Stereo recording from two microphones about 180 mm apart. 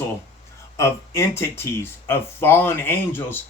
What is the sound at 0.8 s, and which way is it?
Speech, 15° left (ahead or behind).